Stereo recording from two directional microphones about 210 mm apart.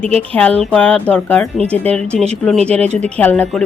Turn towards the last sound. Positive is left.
turn(degrees=5)  # may be behind; listen again after turning